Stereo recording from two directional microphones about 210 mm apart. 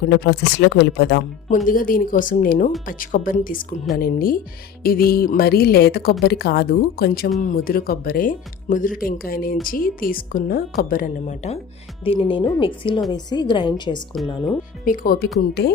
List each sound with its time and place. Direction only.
0.0 s speech: 50° left (ahead or behind)
1.5 s speech: 40° left (ahead or behind)
12.0 s speech: 25° left (ahead or behind)
14.8 s speech: 40° left (ahead or behind)